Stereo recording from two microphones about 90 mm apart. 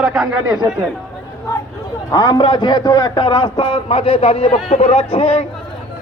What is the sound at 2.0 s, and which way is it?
A man's voice, 45° left (ahead or behind).